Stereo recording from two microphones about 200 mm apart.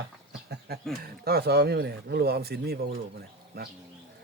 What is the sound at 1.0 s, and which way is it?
Speech, 50° right (ahead or behind).